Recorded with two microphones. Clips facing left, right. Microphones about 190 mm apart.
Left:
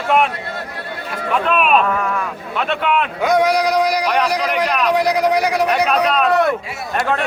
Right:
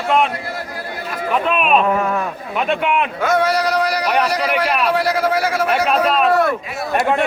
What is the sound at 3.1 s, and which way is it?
Speech, 15° left (ahead or behind).